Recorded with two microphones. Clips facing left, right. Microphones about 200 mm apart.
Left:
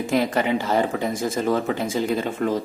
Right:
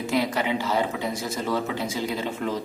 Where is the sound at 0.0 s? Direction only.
50° left (ahead or behind).